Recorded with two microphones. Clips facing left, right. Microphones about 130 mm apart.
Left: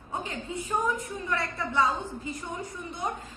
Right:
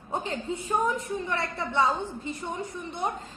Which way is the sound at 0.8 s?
30° right (ahead or behind).